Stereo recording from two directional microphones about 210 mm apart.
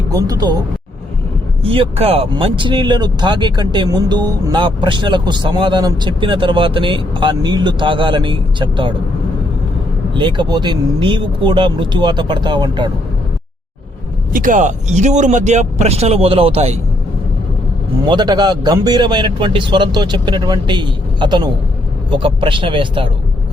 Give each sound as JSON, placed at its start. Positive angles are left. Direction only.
{"t": 0.1, "sound": "speech", "side_deg": -15}
{"t": 1.6, "sound": "speech", "side_deg": -25}
{"t": 10.2, "sound": "speech", "side_deg": -20}
{"t": 14.3, "sound": "speech", "side_deg": -40}
{"t": 18.1, "sound": "speech", "side_deg": -20}